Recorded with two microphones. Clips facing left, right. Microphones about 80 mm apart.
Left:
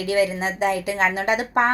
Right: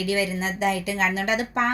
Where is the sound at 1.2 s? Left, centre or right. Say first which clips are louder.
Left 2 dB; left.